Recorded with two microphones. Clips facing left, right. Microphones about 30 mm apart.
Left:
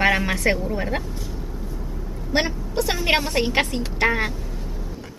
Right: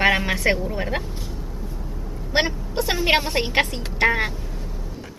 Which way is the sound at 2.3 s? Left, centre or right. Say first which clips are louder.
Right 1 dB; centre.